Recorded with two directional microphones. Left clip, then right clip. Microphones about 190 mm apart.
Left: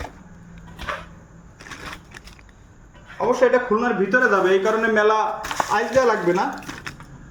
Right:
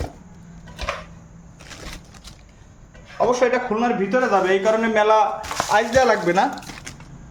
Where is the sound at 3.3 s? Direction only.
40° right (ahead or behind).